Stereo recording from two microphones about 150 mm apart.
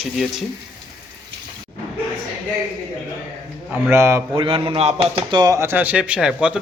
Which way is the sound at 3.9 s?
15° right (ahead or behind).